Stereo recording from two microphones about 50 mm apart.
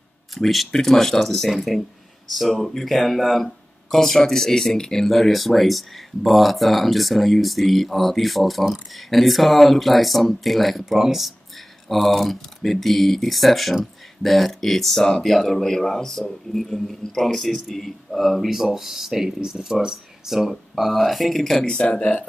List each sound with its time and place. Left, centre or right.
0.3 s speech: centre
21.6 s speech: centre